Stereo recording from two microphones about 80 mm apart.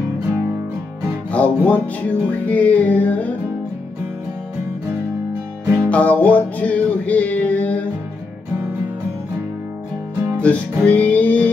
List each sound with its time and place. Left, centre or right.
1.3 s music: centre
5.9 s music: centre
10.3 s music: centre